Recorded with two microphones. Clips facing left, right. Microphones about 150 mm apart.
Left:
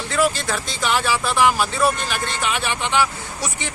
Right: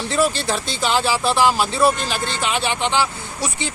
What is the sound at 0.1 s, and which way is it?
Speech, 30° right (ahead or behind).